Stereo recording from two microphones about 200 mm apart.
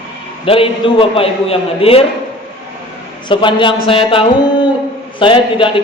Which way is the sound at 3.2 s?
25° left (ahead or behind).